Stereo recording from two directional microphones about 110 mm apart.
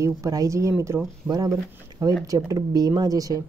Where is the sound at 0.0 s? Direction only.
30° right (ahead or behind).